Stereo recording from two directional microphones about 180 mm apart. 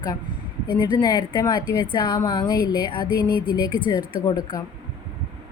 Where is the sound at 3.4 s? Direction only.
10° right (ahead or behind).